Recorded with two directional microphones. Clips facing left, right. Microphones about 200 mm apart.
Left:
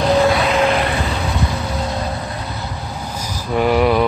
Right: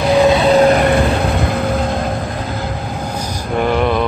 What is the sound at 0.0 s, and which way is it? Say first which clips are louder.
Vehicle: right 3 dB; 15° right (ahead or behind).